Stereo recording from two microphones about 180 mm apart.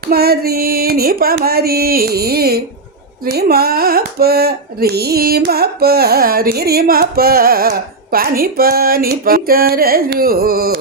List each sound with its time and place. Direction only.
0.1 s carnatic music: 60° right (ahead or behind)